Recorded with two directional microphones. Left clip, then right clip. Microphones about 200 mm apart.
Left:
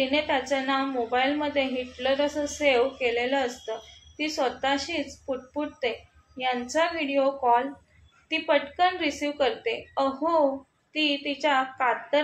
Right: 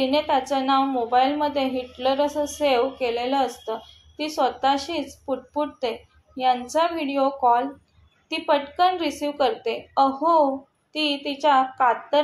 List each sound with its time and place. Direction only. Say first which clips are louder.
0.0 s a woman's voice: right 4 dB; 25° right (ahead or behind)